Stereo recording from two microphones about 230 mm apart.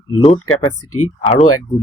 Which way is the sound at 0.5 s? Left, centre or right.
Left.